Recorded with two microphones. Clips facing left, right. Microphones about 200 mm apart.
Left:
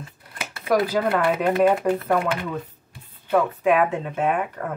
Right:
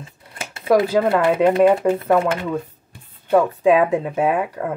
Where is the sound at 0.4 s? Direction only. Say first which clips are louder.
Right 5 dB; 25° right (ahead or behind).